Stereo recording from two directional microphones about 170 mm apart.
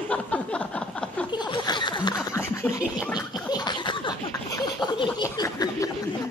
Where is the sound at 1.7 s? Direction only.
25° left (ahead or behind).